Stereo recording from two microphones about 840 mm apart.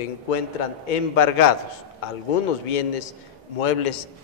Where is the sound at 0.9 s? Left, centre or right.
Left.